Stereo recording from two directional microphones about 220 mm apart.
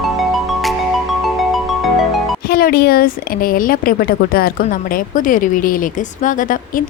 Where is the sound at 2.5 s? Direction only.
45° left (ahead or behind).